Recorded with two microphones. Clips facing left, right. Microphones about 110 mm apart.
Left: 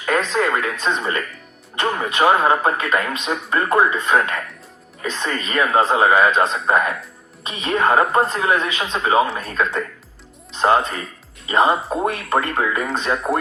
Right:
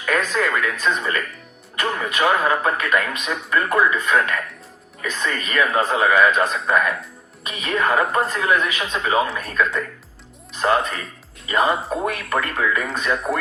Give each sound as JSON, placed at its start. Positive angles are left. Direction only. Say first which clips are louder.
{"t": 0.0, "sound": "speech", "louder": "left 2 dB", "side_deg": 30}